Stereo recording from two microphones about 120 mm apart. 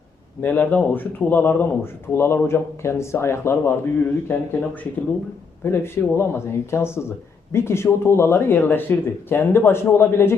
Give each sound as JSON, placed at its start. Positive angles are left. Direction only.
{"t": 0.4, "sound": "speech", "side_deg": 10}